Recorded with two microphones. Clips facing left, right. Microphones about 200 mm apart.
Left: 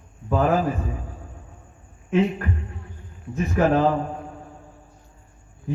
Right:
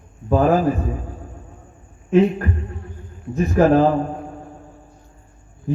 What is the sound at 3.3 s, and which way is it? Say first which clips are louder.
Speech: right 5 dB; 35° right (ahead or behind).